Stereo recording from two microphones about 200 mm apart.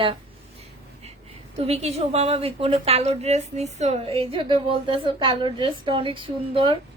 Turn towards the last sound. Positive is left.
turn(degrees=-25)  # may be behind; listen again after turning